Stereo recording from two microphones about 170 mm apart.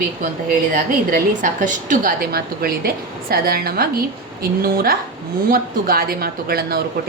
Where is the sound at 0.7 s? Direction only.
55° right (ahead or behind).